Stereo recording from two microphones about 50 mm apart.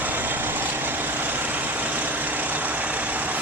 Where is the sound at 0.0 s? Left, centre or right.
Right.